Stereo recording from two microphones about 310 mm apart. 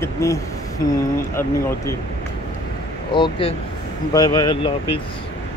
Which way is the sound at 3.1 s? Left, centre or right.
Centre.